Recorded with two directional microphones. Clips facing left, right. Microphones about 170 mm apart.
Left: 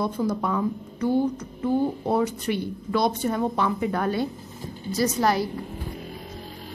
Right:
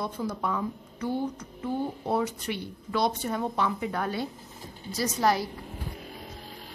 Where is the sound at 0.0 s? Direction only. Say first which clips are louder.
Left 6 dB; 45° left (ahead or behind).